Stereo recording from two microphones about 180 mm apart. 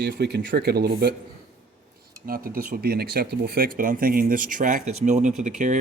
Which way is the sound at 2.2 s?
55° right (ahead or behind).